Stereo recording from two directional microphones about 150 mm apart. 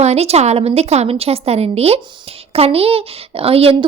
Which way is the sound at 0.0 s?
45° right (ahead or behind).